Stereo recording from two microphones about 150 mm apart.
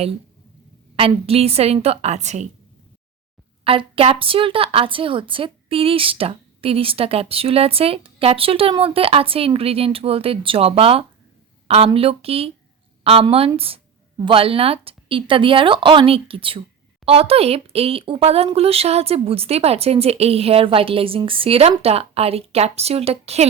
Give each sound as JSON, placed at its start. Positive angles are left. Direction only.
{"t": 0.9, "sound": "a woman's voice", "side_deg": -40}
{"t": 3.6, "sound": "a woman's voice", "side_deg": -40}
{"t": 13.6, "sound": "a woman's voice", "side_deg": -40}